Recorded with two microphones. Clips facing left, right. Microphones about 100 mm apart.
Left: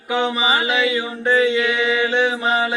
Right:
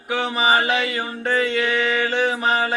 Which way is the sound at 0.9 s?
50° right (ahead or behind).